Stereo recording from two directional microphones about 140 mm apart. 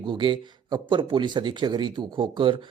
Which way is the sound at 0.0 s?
35° right (ahead or behind).